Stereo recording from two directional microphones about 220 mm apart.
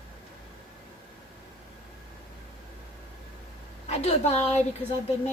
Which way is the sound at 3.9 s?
30° left (ahead or behind).